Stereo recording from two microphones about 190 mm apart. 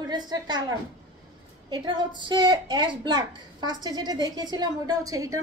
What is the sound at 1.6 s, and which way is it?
A woman's voice, 20° right (ahead or behind).